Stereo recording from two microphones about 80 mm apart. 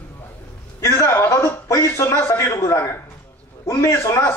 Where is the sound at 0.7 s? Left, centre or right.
Left.